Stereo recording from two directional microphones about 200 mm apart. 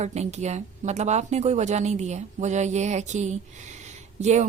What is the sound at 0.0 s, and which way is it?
Speech, 35° right (ahead or behind).